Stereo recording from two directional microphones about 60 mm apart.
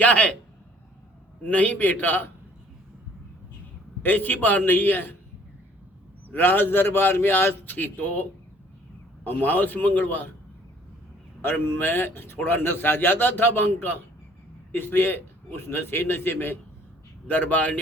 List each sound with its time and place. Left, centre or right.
0.0 s a man's voice: left
1.5 s a man's voice: left
4.0 s a man's voice: left
6.3 s a man's voice: left
11.4 s a man's voice: left
17.2 s a man's voice: left